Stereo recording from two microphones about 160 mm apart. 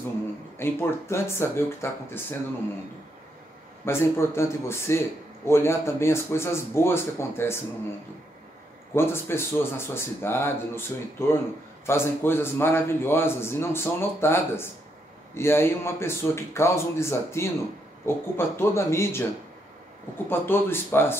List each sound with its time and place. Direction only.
0.6 s a man's voice: 15° left (ahead or behind)
3.8 s a man's voice: 15° left (ahead or behind)
8.9 s a man's voice: 15° left (ahead or behind)
20.2 s a man's voice: 15° left (ahead or behind)